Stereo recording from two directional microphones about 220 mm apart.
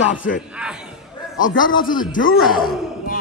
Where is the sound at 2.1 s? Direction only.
65° left (ahead or behind).